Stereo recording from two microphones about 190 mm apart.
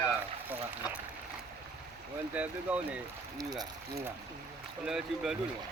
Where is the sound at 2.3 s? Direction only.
10° right (ahead or behind).